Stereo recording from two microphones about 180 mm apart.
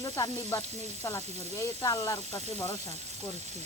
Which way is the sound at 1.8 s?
15° left (ahead or behind).